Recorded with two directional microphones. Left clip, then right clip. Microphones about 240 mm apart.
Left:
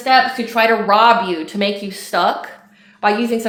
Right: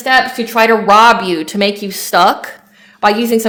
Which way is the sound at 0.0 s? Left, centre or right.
Right.